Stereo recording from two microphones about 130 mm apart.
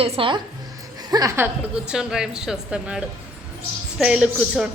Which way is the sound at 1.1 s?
25° right (ahead or behind).